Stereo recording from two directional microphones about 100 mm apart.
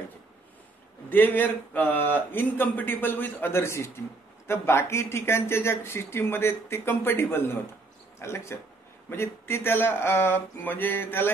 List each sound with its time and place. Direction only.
1.1 s speech: 20° left (ahead or behind)